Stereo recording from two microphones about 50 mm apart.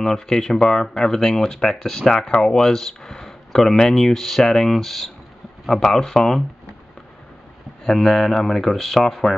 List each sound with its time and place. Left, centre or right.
0.0 s speech: centre
7.8 s speech: centre